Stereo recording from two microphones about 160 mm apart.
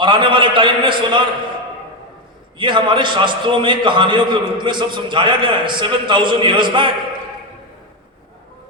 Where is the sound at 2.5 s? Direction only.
30° right (ahead or behind).